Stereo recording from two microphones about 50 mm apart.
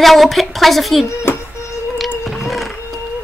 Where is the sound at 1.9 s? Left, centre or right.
Centre.